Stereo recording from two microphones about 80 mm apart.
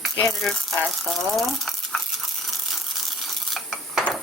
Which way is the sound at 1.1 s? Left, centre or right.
Centre.